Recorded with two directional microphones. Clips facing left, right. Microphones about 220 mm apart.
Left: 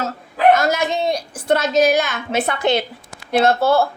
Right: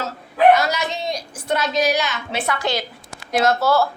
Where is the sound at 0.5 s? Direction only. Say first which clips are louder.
Left 3 dB; 50° left (ahead or behind).